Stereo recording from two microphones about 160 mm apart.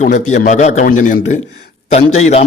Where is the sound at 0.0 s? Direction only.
50° left (ahead or behind).